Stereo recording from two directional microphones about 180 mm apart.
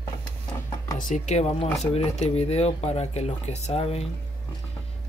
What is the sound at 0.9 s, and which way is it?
Speech, 45° left (ahead or behind).